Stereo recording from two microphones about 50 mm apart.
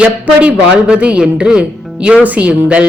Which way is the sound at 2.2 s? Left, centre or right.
Right.